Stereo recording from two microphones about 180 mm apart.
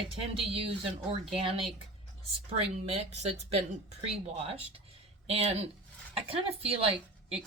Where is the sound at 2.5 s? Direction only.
35° right (ahead or behind).